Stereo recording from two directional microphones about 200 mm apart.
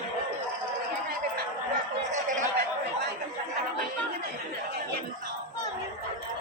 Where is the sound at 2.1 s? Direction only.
40° right (ahead or behind).